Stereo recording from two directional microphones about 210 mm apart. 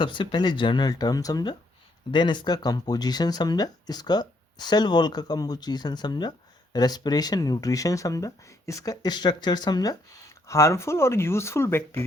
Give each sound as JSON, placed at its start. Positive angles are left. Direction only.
{"t": 0.0, "sound": "speech", "side_deg": 25}